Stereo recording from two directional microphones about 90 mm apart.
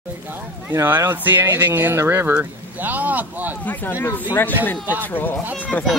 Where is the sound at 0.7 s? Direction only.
30° right (ahead or behind).